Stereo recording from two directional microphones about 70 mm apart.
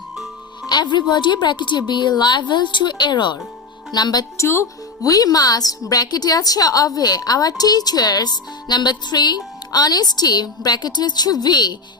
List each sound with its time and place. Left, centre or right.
0.7 s a woman's voice: left
3.9 s speech: left
4.4 s speech: left
5.0 s a woman's voice: left